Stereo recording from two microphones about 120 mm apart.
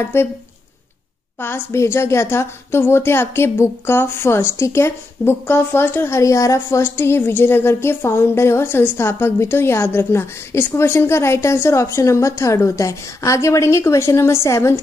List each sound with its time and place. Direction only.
0.0 s a woman's voice: 20° left (ahead or behind)
1.4 s a woman's voice: 20° left (ahead or behind)